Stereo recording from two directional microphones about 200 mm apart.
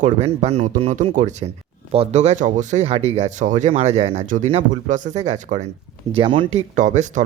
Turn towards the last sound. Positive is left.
turn(degrees=-35)  # may be behind; listen again after turning